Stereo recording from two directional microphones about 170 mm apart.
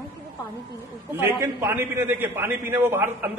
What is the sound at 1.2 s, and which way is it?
A man's voice, 10° right (ahead or behind).